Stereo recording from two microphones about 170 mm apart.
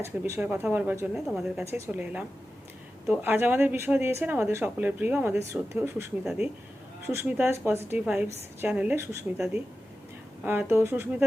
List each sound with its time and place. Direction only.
0.0 s speech: 10° right (ahead or behind)
7.1 s speech: 10° right (ahead or behind)